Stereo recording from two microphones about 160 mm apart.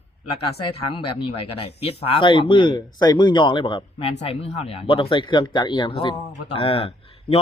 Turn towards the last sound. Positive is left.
turn(degrees=35)  # may be behind; listen again after turning